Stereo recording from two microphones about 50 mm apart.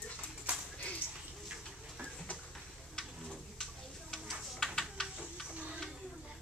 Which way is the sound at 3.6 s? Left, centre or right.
Centre.